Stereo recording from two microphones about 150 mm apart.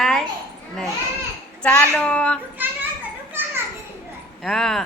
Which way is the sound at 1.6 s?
10° left (ahead or behind).